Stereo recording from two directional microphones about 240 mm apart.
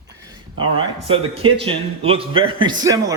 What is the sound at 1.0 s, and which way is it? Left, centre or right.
A man's voice, right.